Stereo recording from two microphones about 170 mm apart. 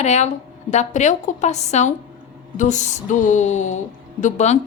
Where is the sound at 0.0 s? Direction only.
40° left (ahead or behind).